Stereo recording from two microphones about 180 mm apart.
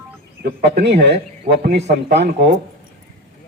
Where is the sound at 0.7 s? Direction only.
70° right (ahead or behind).